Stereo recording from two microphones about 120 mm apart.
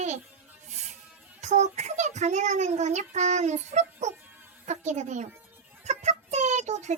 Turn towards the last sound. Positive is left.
turn(degrees=-75)  # may be behind; listen again after turning